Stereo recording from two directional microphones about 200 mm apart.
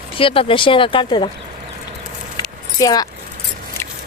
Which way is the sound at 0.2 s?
25° left (ahead or behind).